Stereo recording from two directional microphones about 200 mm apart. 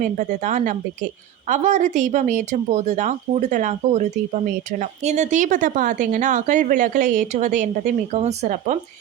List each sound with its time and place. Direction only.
0.0 s speech: 40° right (ahead or behind)